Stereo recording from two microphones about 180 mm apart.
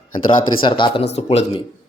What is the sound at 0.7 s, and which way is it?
Speech, 25° left (ahead or behind).